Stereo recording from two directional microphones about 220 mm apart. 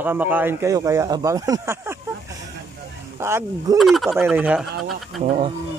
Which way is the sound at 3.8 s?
Centre (ahead or behind).